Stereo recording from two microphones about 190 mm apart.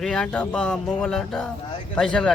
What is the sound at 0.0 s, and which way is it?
Speech, centre (ahead or behind).